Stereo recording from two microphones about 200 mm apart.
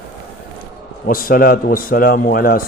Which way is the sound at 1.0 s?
45° left (ahead or behind).